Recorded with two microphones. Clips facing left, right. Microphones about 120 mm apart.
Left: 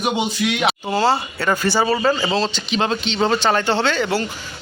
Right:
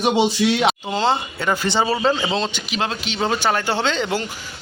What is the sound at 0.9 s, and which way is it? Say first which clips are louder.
Speech: left 2 dB; 20° right (ahead or behind).